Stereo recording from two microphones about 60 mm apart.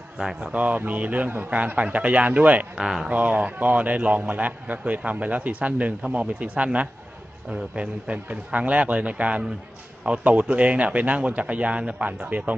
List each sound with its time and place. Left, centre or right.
0.2 s speech: centre
0.5 s a man's voice: right
2.7 s speech: centre
3.1 s a man's voice: right